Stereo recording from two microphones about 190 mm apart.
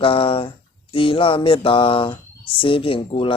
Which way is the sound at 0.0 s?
30° left (ahead or behind).